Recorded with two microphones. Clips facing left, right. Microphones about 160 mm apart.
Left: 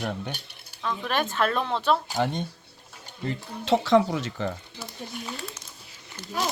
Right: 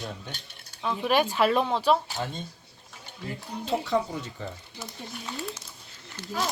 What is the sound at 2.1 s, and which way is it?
Speech, 70° left (ahead or behind).